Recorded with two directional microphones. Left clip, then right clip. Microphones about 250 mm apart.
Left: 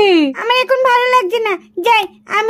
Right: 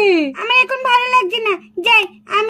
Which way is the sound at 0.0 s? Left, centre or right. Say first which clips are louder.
Left 3 dB; left.